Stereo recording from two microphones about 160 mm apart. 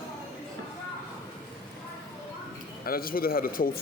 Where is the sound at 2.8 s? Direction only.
65° left (ahead or behind).